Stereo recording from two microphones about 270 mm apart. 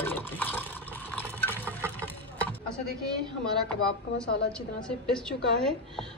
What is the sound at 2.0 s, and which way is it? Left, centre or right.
Boat, centre.